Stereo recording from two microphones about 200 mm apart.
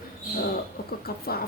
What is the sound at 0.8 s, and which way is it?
Speech, 50° left (ahead or behind).